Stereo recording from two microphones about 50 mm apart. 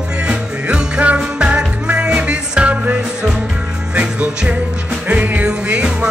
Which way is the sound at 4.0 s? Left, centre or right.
Right.